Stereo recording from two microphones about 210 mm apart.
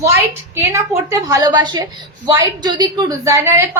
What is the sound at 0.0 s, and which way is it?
A woman's voice, 15° right (ahead or behind).